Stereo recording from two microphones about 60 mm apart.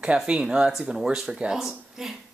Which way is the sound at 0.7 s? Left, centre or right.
Centre.